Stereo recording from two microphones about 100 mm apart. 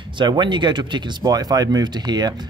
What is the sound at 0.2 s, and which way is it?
Speech, 50° right (ahead or behind).